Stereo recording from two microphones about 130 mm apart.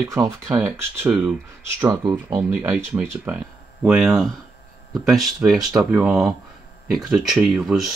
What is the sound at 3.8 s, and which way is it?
Speech, 5° right (ahead or behind).